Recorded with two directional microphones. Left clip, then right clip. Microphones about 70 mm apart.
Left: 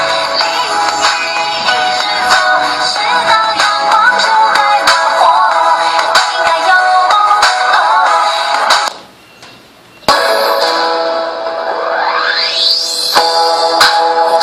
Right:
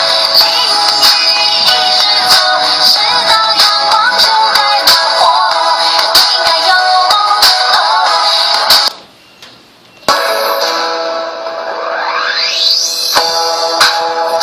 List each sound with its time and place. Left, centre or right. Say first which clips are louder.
0.0 s music: right 3 dB; centre
10.1 s music: left 1 dB; left
12.4 s music: right 1 dB; left